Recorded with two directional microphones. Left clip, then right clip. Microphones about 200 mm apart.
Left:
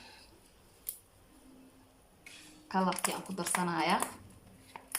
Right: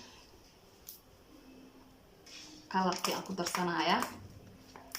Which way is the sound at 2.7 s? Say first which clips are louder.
Even; 10° left (ahead or behind).